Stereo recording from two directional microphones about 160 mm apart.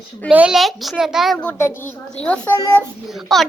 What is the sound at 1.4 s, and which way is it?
A child's voice, 15° left (ahead or behind).